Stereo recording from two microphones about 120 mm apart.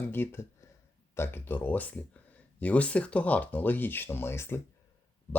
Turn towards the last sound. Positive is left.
turn(degrees=20)  # may be behind; listen again after turning